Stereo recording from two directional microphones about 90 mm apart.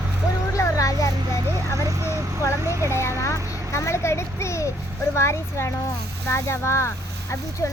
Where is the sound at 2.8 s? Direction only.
30° left (ahead or behind).